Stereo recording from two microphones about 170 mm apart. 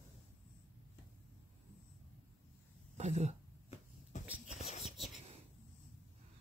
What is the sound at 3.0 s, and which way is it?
Speech, 40° right (ahead or behind).